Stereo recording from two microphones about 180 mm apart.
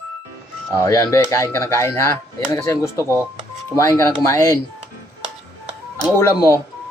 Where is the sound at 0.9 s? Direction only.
15° left (ahead or behind).